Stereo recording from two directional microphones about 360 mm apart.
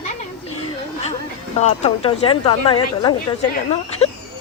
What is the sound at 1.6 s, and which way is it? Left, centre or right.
A woman's voice, centre.